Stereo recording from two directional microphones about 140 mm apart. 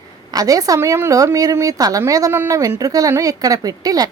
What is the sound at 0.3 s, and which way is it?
A woman's voice, 25° right (ahead or behind).